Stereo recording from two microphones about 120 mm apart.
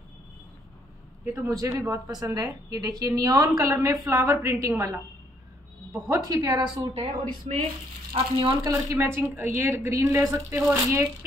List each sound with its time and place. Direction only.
1.2 s a woman's voice: 20° right (ahead or behind)
6.0 s a woman's voice: 30° right (ahead or behind)
8.1 s speech: 50° right (ahead or behind)
8.6 s a woman's voice: 25° right (ahead or behind)